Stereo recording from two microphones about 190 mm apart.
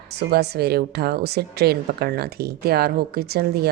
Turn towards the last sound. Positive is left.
turn(degrees=-55)  # may be behind; listen again after turning